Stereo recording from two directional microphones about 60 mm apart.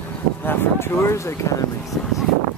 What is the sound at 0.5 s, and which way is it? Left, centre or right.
Speech, left.